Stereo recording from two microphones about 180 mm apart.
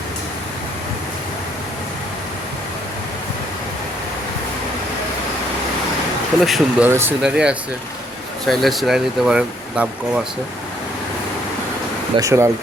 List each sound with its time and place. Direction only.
6.4 s speech: 5° right (ahead or behind)
12.1 s speech: 15° right (ahead or behind)